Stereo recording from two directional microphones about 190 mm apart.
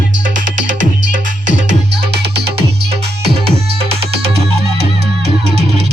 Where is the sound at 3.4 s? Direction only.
30° right (ahead or behind).